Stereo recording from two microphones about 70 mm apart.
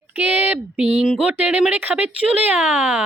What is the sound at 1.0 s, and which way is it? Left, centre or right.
Speech, centre.